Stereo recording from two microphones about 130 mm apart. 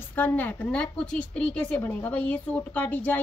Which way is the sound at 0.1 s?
15° left (ahead or behind).